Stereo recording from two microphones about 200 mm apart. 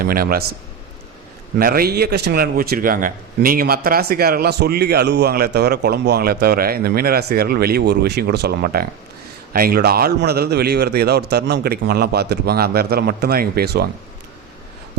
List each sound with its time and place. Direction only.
0.0 s a man's voice: 45° right (ahead or behind)
1.5 s a man's voice: 45° right (ahead or behind)